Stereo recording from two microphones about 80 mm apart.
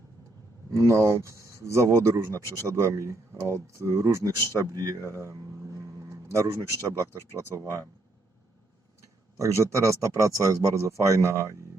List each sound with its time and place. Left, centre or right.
0.7 s speech: right
2.3 s speech: left
2.6 s speech: right
9.4 s speech: right